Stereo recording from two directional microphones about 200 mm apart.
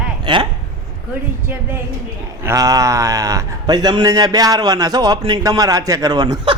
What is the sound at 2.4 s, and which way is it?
A man's voice, 15° right (ahead or behind).